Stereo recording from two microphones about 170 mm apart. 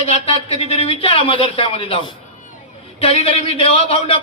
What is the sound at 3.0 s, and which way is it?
A man's voice, 35° left (ahead or behind).